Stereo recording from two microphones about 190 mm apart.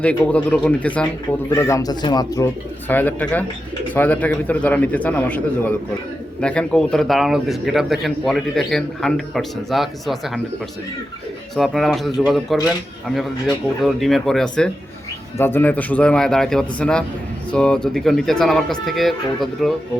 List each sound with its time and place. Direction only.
0.0 s a man's voice: 5° left (ahead or behind)
11.5 s a man's voice: centre (ahead or behind)
13.8 s a man's voice: centre (ahead or behind)